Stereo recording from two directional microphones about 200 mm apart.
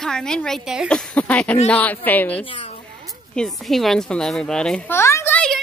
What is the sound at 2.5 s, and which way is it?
Speech, 30° left (ahead or behind).